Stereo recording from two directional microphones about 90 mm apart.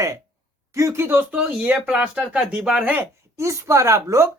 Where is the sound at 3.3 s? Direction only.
35° right (ahead or behind).